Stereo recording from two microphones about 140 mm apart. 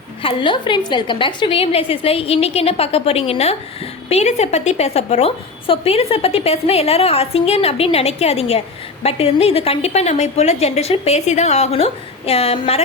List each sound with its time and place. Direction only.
0.2 s a woman's voice: 40° left (ahead or behind)